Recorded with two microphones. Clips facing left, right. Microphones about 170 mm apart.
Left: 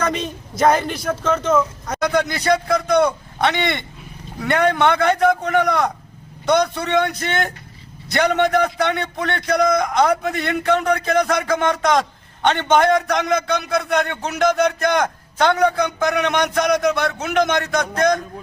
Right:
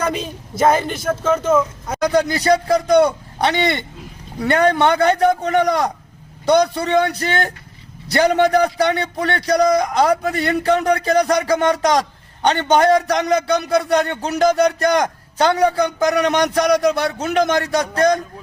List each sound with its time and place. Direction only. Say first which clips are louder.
0.0 s a man's voice: even; 5° right (ahead or behind)
2.0 s a man's voice: right 3 dB; 35° right (ahead or behind)